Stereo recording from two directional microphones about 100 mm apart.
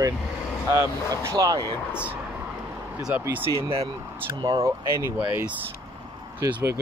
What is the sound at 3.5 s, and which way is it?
Speech, 65° right (ahead or behind).